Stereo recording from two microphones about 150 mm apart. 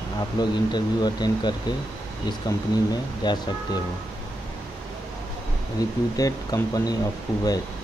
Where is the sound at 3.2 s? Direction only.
30° left (ahead or behind).